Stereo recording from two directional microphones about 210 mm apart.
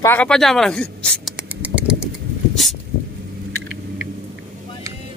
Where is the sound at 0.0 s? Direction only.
5° left (ahead or behind).